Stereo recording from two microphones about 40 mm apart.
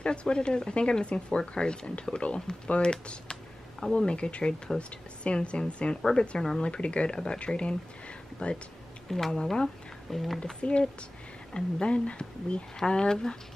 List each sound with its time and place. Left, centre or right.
0.0 s speech: left
9.3 s speech: centre
10.1 s speech: centre
10.4 s speech: left
12.7 s speech: centre